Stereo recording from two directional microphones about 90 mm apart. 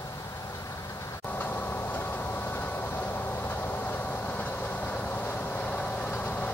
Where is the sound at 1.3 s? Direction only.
25° left (ahead or behind).